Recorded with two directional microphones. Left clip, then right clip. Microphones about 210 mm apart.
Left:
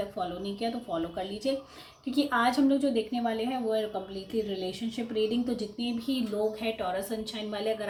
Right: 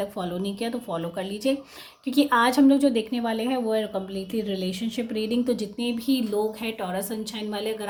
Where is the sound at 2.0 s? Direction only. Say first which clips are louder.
Right 6 dB; 50° right (ahead or behind).